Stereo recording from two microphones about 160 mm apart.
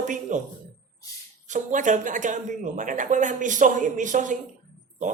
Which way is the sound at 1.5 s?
50° right (ahead or behind).